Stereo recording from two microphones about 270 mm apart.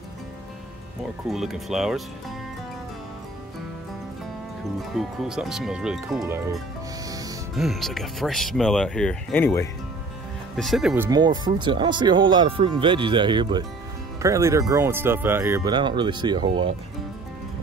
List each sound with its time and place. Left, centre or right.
1.3 s speech: centre
4.9 s speech: centre
11.1 s speech: centre